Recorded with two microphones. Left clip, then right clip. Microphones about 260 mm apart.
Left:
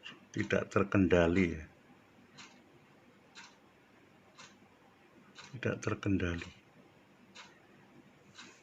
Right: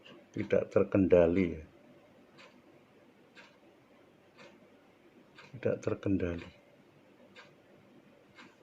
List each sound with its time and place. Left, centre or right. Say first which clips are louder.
0.0 s speech: left 1 dB; left
5.5 s speech: right 4 dB; left